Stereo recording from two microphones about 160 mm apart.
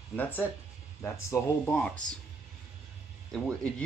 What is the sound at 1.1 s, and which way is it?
Speech, 15° left (ahead or behind).